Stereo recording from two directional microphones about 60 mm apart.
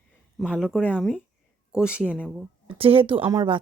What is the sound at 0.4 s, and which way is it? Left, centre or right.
Speech, centre.